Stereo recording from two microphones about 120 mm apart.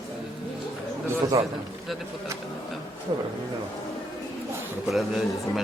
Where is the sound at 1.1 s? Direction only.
25° right (ahead or behind).